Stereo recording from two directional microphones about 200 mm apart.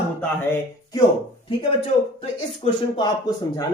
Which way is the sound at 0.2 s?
10° left (ahead or behind).